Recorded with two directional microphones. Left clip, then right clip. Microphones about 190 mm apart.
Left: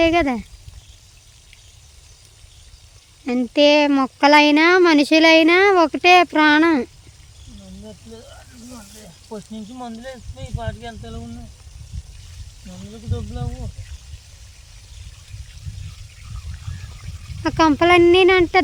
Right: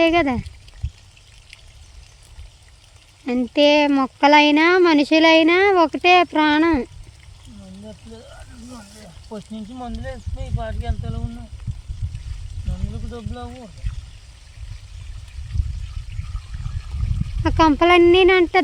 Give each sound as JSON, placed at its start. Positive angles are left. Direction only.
{"t": 0.0, "sound": "speech", "side_deg": 0}
{"t": 3.2, "sound": "speech", "side_deg": 5}
{"t": 8.1, "sound": "speech", "side_deg": -5}
{"t": 12.7, "sound": "speech", "side_deg": -5}
{"t": 17.4, "sound": "speech", "side_deg": 5}